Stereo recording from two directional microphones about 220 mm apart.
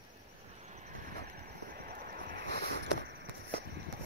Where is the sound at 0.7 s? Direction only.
35° right (ahead or behind).